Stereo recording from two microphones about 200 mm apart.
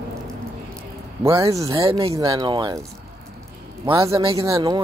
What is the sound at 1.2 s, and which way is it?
Speech, 15° right (ahead or behind).